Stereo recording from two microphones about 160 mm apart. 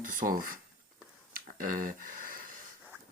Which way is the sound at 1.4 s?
60° right (ahead or behind).